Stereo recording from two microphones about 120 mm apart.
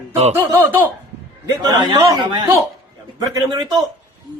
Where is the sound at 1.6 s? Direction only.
35° right (ahead or behind).